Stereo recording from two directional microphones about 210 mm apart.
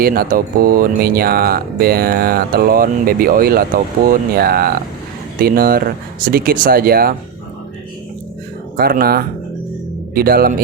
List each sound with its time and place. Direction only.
0.0 s speech: 45° right (ahead or behind)
8.7 s speech: 45° right (ahead or behind)